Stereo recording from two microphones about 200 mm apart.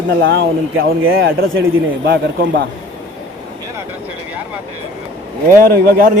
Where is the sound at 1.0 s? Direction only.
80° right.